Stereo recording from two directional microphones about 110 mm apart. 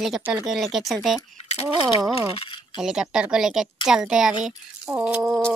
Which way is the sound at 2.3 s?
50° left (ahead or behind).